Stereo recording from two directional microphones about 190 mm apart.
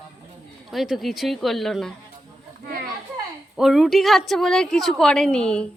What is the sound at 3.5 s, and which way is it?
A woman's voice, centre (ahead or behind).